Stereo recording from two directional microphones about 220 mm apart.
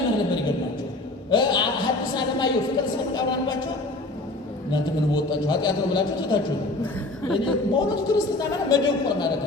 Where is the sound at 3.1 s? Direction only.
20° left (ahead or behind).